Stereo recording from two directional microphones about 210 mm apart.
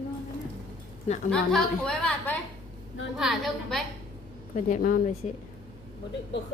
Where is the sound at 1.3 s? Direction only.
5° left (ahead or behind).